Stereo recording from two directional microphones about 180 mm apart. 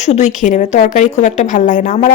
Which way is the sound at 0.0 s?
40° left (ahead or behind).